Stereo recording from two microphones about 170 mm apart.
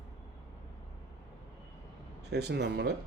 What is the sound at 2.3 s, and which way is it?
Speech, 75° right (ahead or behind).